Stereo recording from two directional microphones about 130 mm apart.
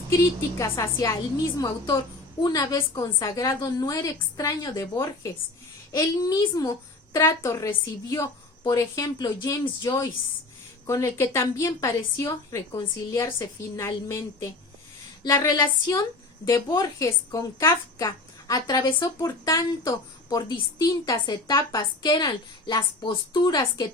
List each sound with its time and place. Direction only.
0.6 s a woman's voice: 25° left (ahead or behind)
15.4 s a woman's voice: 30° left (ahead or behind)